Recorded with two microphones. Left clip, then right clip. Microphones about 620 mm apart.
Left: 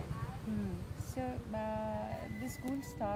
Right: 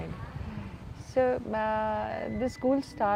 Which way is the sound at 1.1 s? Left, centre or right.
Right.